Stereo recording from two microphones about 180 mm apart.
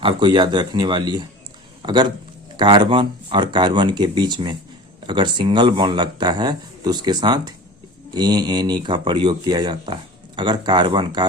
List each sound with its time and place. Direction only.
0.0 s speech: 25° right (ahead or behind)